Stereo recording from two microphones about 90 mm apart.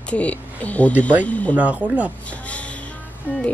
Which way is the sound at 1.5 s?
15° right (ahead or behind).